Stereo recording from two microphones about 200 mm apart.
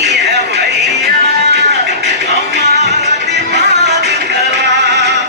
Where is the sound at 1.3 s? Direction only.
55° right (ahead or behind).